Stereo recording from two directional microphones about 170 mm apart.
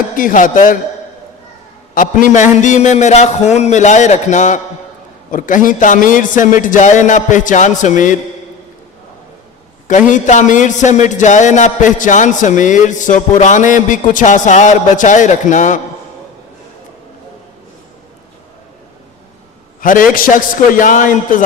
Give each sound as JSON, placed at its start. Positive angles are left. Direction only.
{"t": 0.2, "sound": "a man's voice", "side_deg": 50}
{"t": 2.0, "sound": "a man's voice", "side_deg": 50}
{"t": 10.1, "sound": "a man's voice", "side_deg": 45}
{"t": 19.8, "sound": "a man's voice", "side_deg": 55}